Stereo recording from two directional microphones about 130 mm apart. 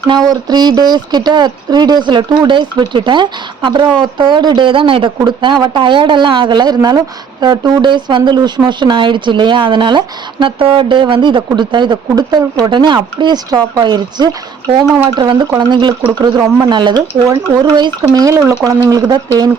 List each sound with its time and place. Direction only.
0.1 s speech: 30° right (ahead or behind)